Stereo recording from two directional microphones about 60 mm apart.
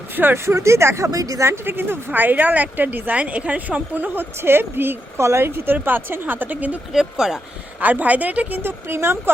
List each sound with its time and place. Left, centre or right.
0.3 s speech: right
1.1 s speech: right
1.5 s speech: right
5.1 s speech: right
6.9 s speech: centre
7.8 s speech: right